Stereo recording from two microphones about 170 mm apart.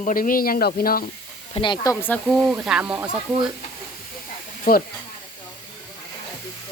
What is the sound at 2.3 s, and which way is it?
Speech, 5° right (ahead or behind).